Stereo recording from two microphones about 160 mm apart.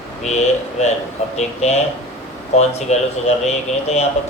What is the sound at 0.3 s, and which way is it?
Speech, 45° left (ahead or behind).